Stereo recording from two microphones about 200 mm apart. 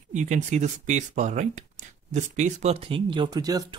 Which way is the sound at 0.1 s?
40° right (ahead or behind).